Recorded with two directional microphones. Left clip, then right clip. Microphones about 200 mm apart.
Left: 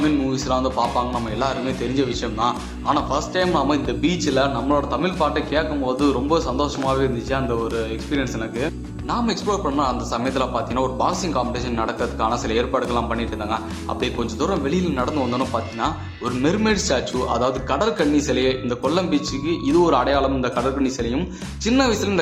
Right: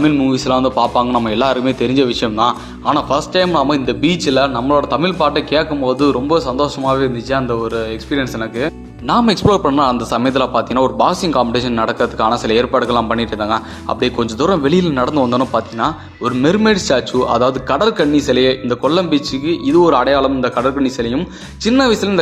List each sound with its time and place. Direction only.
0.0 s a man's voice: 40° right (ahead or behind); by 8.7 s 25° right (ahead or behind)
9.0 s a man's voice: 45° right (ahead or behind)